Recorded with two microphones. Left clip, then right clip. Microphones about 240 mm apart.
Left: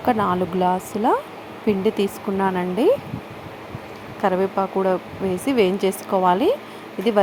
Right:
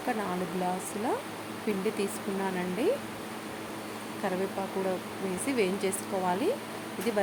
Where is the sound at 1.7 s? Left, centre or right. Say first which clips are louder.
Left 11 dB; left.